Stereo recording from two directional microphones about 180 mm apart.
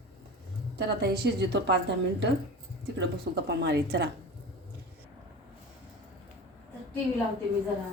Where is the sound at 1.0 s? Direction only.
70° right (ahead or behind).